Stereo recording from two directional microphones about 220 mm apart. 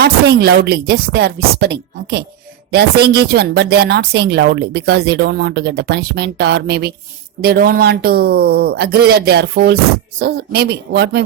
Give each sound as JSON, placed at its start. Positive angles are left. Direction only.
{"t": 0.0, "sound": "a woman's voice", "side_deg": -50}